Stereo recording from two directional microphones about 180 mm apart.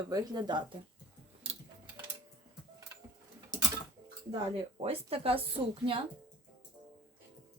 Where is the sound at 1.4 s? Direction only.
30° right (ahead or behind).